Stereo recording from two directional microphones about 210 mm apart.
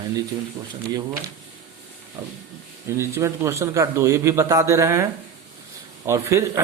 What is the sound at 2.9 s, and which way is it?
A man's voice, 15° right (ahead or behind).